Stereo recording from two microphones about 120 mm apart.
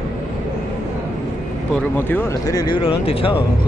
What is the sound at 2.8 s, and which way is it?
Speech, 50° left (ahead or behind).